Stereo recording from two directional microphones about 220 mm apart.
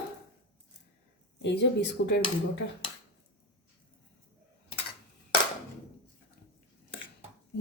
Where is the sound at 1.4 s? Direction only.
50° left (ahead or behind).